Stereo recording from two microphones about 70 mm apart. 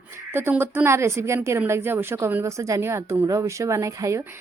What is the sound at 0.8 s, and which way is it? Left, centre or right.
Speech, right.